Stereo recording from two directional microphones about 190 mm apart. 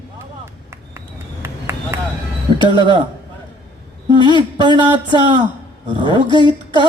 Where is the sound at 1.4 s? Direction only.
15° right (ahead or behind).